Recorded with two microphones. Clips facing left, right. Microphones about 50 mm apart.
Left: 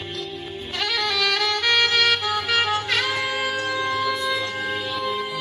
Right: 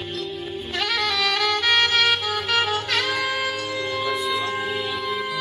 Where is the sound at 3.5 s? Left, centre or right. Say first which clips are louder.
Left 3 dB; left.